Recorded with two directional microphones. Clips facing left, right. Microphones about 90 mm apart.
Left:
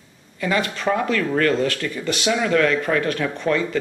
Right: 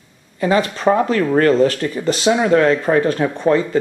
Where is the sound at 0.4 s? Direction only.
35° right (ahead or behind).